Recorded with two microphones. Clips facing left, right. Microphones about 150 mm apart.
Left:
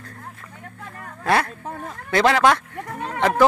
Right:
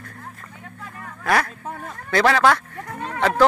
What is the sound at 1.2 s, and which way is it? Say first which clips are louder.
Speech: left 1 dB; 25° left (ahead or behind).